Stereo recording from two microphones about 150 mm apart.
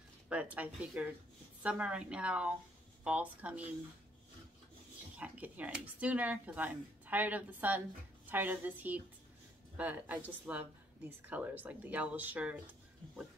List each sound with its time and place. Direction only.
0.3 s speech: 10° right (ahead or behind)
5.1 s speech: 10° right (ahead or behind)